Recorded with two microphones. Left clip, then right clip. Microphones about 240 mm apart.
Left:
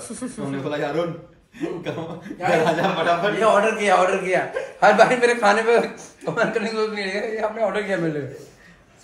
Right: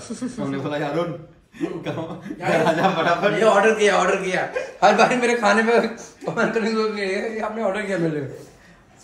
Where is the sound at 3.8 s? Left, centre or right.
Left.